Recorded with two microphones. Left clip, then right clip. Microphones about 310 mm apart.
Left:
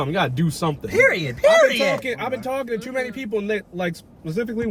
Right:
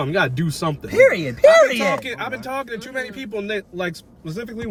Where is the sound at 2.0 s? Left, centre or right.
Centre.